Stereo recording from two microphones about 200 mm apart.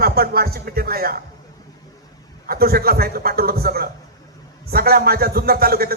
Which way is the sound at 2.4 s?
50° right (ahead or behind).